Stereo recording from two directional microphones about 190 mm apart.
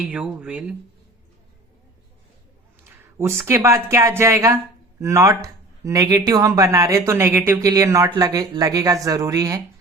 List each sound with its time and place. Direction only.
0.0 s speech: 5° right (ahead or behind)
2.8 s speech: 15° right (ahead or behind)